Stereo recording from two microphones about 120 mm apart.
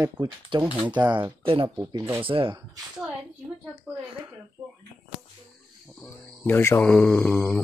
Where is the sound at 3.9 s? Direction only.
10° right (ahead or behind).